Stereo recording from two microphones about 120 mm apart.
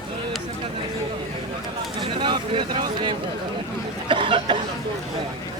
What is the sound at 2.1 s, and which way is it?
Speech, 40° right (ahead or behind).